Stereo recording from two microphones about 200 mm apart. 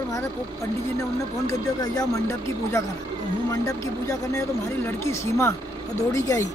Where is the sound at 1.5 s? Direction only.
15° left (ahead or behind).